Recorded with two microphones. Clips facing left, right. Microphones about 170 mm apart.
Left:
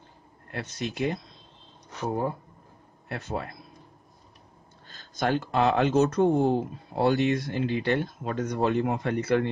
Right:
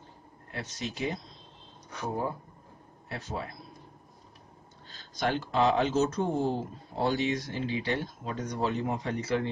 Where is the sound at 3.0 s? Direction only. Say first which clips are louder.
Left 4 dB; 60° left (ahead or behind).